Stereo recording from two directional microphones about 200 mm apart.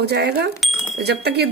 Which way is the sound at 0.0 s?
55° right (ahead or behind).